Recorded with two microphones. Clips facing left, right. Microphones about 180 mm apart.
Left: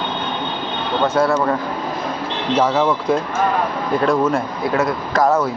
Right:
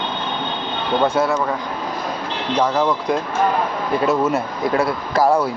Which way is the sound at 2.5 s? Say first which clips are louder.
Left 2 dB; 5° left (ahead or behind).